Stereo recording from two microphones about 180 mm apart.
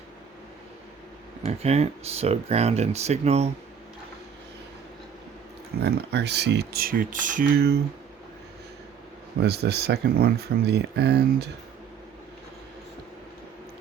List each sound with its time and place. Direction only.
1.5 s speech: 35° right (ahead or behind)
5.8 s speech: 65° right (ahead or behind)
9.4 s speech: 65° right (ahead or behind)